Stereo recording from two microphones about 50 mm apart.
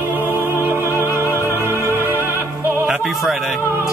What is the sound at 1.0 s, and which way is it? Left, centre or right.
Music, right.